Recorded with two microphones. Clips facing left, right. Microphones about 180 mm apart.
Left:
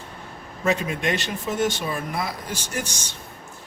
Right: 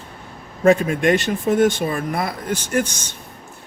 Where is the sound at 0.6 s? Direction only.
50° right (ahead or behind).